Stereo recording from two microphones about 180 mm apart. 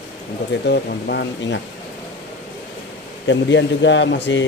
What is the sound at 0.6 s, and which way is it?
Speech, 65° left (ahead or behind).